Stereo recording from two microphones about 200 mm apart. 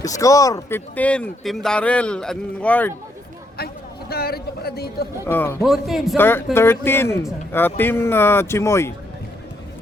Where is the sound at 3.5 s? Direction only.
50° left (ahead or behind).